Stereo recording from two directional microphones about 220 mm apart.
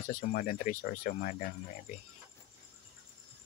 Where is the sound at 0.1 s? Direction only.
40° left (ahead or behind).